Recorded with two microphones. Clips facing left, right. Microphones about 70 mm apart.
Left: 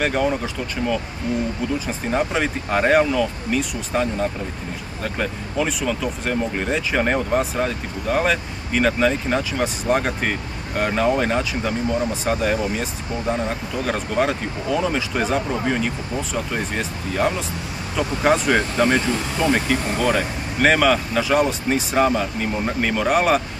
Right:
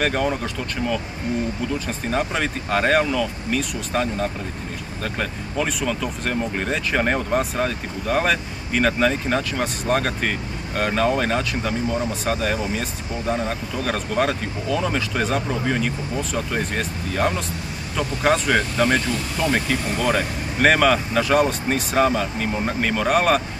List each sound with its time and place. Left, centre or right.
0.0 s speech: centre
1.9 s speech: centre
18.9 s speech: left
20.0 s speech: centre